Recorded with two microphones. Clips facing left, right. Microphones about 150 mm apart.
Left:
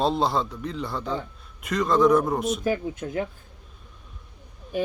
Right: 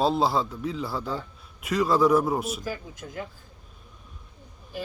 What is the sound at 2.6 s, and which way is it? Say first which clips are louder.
Speech: left 9 dB; 70° left (ahead or behind).